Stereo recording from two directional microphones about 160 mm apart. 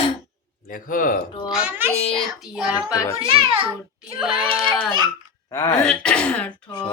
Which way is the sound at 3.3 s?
35° right (ahead or behind).